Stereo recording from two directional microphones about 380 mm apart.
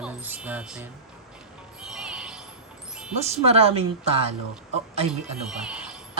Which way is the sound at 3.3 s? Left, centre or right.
Centre.